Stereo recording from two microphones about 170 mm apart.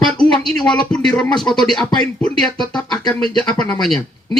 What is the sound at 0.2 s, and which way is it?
Speech, 5° left (ahead or behind).